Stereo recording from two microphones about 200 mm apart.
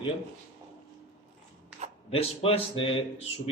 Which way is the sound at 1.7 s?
5° right (ahead or behind).